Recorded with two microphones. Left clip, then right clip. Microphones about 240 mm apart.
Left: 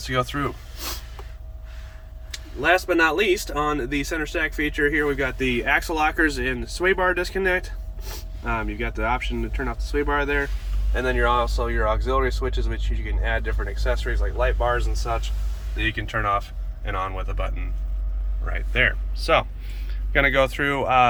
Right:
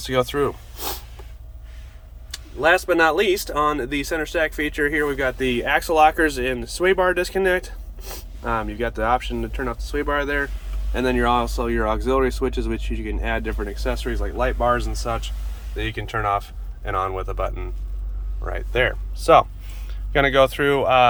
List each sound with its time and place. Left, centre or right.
0.0 s speech: right
2.6 s speech: centre
10.9 s speech: right
15.8 s speech: centre